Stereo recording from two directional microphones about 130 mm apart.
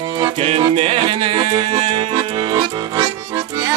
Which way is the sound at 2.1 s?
30° right (ahead or behind).